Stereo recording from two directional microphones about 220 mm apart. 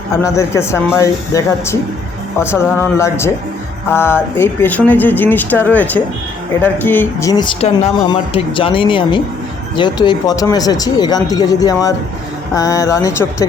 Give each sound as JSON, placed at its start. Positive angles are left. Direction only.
{"t": 0.2, "sound": "speech", "side_deg": 15}